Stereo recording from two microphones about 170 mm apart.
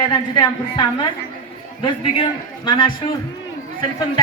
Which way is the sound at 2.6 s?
30° left (ahead or behind).